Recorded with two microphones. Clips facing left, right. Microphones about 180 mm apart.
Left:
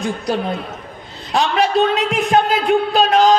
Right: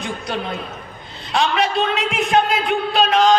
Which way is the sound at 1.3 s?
35° left (ahead or behind).